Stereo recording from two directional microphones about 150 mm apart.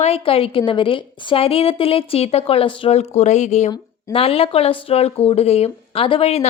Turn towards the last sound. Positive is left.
turn(degrees=40)  # may be behind; listen again after turning